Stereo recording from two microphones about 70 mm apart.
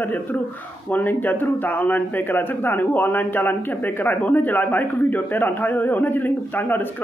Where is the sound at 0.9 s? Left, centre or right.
Left.